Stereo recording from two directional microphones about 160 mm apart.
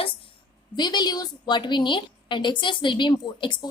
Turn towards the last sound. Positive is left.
turn(degrees=30)  # may be behind; listen again after turning